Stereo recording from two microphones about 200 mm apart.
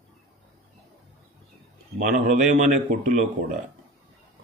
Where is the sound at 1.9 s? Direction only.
40° right (ahead or behind).